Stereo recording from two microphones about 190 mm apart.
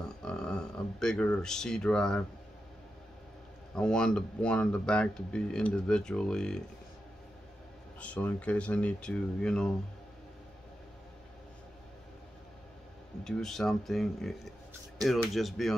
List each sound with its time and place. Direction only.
0.2 s speech: 5° left (ahead or behind)
3.7 s speech: 5° left (ahead or behind)
8.0 s speech: 5° left (ahead or behind)
13.2 s speech: centre (ahead or behind)